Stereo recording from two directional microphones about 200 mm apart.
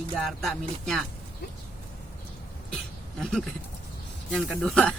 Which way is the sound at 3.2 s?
Centre (ahead or behind).